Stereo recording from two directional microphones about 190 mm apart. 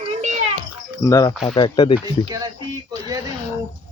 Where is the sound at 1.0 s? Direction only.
15° left (ahead or behind).